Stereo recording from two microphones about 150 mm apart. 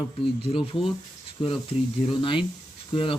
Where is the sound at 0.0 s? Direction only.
35° left (ahead or behind).